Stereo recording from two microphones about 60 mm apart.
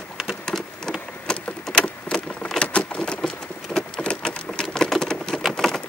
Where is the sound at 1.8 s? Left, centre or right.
Centre.